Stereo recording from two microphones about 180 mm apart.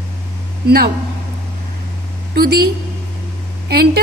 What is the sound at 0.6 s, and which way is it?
Speech, 65° right (ahead or behind).